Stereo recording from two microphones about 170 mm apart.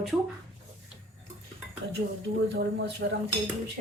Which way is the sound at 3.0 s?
90° right.